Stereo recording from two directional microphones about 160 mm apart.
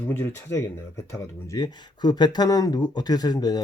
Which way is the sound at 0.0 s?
10° left (ahead or behind).